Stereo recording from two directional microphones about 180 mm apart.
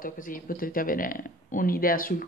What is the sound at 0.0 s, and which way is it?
A woman's voice, 50° left (ahead or behind).